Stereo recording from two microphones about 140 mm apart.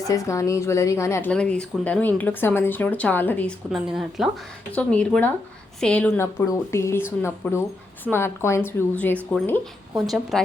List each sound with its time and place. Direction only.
0.0 s speech: 25° left (ahead or behind)
1.3 s speech: 5° left (ahead or behind)
3.7 s speech: 5° right (ahead or behind)
4.7 s speech: 10° left (ahead or behind)
6.1 s speech: 20° left (ahead or behind)
10.3 s speech: centre (ahead or behind)